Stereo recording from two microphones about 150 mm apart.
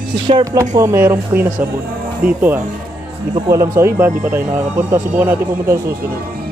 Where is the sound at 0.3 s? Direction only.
25° right (ahead or behind).